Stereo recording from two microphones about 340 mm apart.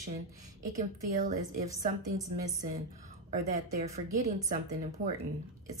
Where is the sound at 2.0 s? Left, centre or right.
Centre.